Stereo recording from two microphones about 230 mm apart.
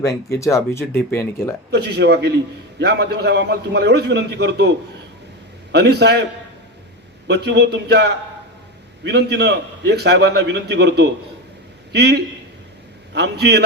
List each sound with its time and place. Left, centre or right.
0.3 s speech: centre
1.7 s a man's voice: right
5.7 s a man's voice: right
7.3 s a man's voice: right